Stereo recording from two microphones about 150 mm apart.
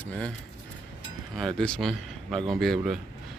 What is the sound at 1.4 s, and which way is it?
Speech, 5° left (ahead or behind).